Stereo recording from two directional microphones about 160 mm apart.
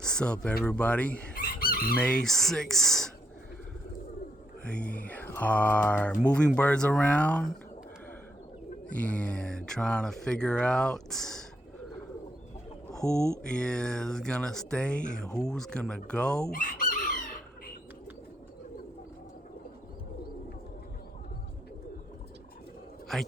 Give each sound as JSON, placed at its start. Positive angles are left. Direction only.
{"t": 0.0, "sound": "speech", "side_deg": 5}
{"t": 0.6, "sound": "a sound", "side_deg": 10}
{"t": 1.4, "sound": "chicken", "side_deg": 65}
{"t": 2.0, "sound": "speech", "side_deg": 5}
{"t": 4.6, "sound": "a sound", "side_deg": 10}
{"t": 9.0, "sound": "speech", "side_deg": 10}
{"t": 13.0, "sound": "speech", "side_deg": 5}
{"t": 16.5, "sound": "chicken", "side_deg": 60}
{"t": 23.1, "sound": "a man's voice", "side_deg": 0}